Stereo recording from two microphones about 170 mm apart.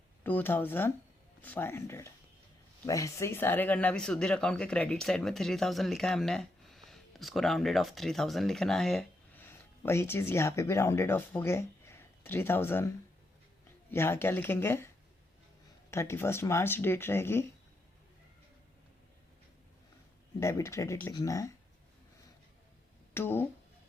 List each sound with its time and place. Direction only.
0.2 s speech: 10° left (ahead or behind)
13.9 s speech: 15° left (ahead or behind)
15.9 s speech: 15° left (ahead or behind)
20.4 s speech: 15° left (ahead or behind)
23.1 s speech: 15° left (ahead or behind)